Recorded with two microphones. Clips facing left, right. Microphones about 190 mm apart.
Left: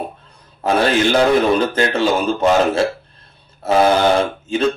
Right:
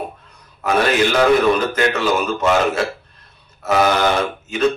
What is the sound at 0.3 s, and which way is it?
A man's voice, 30° left (ahead or behind).